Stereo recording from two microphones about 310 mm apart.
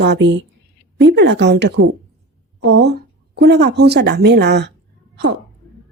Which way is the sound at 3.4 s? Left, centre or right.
Right.